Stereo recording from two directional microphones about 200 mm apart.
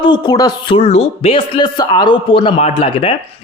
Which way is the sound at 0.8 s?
30° left (ahead or behind).